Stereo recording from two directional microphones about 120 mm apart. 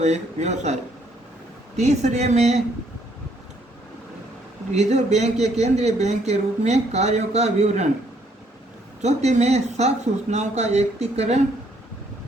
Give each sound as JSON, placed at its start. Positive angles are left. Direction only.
{"t": 0.0, "sound": "speech", "side_deg": -70}
{"t": 1.8, "sound": "speech", "side_deg": -70}
{"t": 4.7, "sound": "speech", "side_deg": -70}
{"t": 9.0, "sound": "speech", "side_deg": -70}